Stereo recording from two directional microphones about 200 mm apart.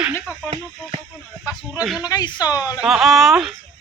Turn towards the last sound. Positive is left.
turn(degrees=0)  # may be behind; listen again after turning